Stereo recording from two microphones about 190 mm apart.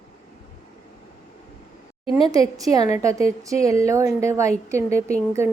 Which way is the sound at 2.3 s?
20° right (ahead or behind).